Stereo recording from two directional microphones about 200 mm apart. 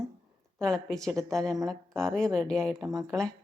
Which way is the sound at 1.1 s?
15° right (ahead or behind).